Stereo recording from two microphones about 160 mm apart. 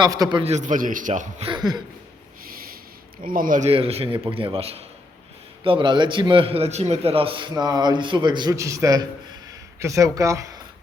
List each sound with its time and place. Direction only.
0.0 s a man's voice: 25° right (ahead or behind)
0.4 s a man's voice: 50° right (ahead or behind)
1.5 s a man's voice: 25° right (ahead or behind)
3.2 s speech: 60° right (ahead or behind)
3.7 s a man's voice: 40° right (ahead or behind); by 10.6 s 20° right (ahead or behind)